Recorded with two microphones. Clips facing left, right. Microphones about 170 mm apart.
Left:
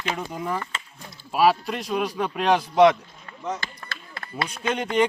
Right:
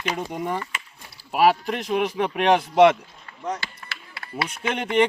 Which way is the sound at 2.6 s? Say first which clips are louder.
Even; 10° right (ahead or behind).